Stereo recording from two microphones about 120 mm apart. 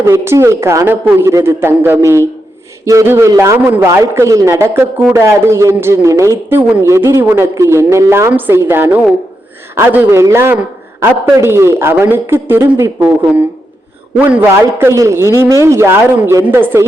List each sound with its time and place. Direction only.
0.0 s a woman's voice: 20° right (ahead or behind)